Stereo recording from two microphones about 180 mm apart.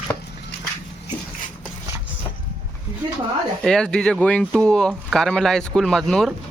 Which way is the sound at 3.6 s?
5° left (ahead or behind).